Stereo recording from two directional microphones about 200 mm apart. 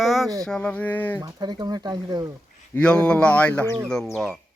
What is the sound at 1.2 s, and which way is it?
Speech, 20° right (ahead or behind).